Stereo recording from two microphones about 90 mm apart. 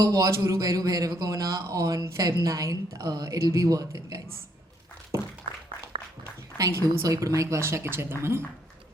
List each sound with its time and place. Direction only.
0.0 s speech: 40° right (ahead or behind)
5.5 s a sound: 80° right
6.6 s speech: 30° right (ahead or behind)